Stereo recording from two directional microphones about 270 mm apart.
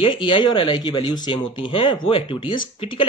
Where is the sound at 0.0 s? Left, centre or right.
Centre.